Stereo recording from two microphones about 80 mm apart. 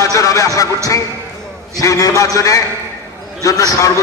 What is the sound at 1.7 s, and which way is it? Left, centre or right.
A man's voice, left.